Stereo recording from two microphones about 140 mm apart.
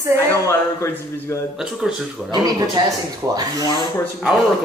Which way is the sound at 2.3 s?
30° right (ahead or behind).